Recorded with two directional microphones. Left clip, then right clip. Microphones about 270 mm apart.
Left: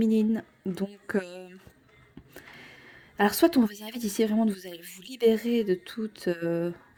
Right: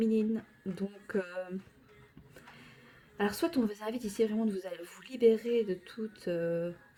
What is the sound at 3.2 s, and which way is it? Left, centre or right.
A woman's voice, left.